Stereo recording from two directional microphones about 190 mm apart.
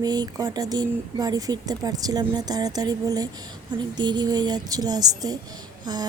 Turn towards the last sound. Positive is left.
turn(degrees=-20)  # may be behind; listen again after turning